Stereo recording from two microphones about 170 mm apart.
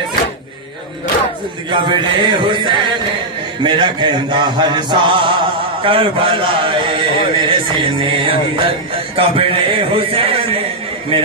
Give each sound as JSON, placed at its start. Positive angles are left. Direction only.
{"t": 1.7, "sound": "a man's voice", "side_deg": -25}
{"t": 3.6, "sound": "chant", "side_deg": -25}
{"t": 7.3, "sound": "speech", "side_deg": -25}